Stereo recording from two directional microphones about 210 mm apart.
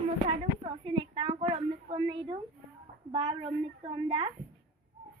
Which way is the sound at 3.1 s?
30° right (ahead or behind).